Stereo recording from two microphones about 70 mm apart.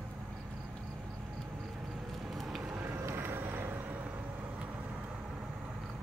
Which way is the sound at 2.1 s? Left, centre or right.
Centre.